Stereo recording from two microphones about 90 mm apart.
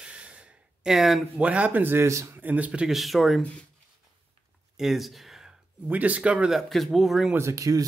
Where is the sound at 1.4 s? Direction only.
15° right (ahead or behind).